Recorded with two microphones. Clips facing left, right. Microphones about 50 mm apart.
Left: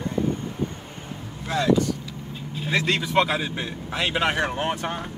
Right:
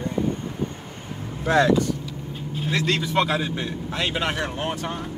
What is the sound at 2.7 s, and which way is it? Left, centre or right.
A man's voice, centre.